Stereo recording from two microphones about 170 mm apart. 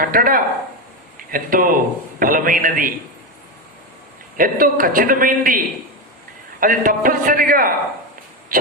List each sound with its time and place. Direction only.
0.0 s a man's voice: 55° right (ahead or behind)
4.4 s a man's voice: 55° right (ahead or behind)